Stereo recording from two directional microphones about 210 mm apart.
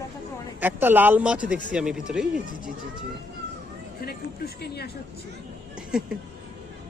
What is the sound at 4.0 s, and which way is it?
Speech, 45° left (ahead or behind).